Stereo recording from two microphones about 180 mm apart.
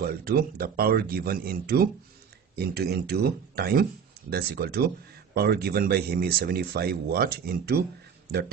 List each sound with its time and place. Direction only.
0.0 s speech: 55° right (ahead or behind)